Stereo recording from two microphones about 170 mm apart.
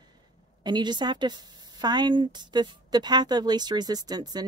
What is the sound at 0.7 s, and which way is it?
A woman's voice, 25° right (ahead or behind).